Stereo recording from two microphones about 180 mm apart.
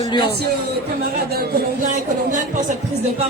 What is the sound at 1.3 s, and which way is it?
Speech, 50° right (ahead or behind).